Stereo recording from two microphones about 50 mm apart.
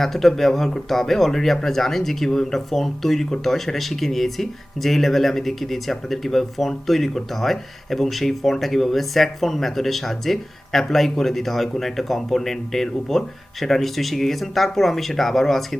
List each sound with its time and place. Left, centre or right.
0.0 s speech: centre